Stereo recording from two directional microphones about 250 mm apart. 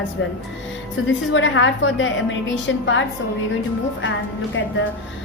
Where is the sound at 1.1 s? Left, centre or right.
Left.